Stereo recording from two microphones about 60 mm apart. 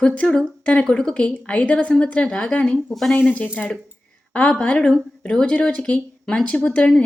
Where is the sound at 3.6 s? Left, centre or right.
Centre.